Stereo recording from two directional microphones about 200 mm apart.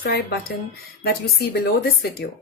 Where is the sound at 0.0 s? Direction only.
50° left (ahead or behind).